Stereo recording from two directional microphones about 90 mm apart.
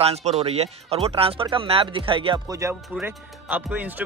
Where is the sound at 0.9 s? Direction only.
90° right.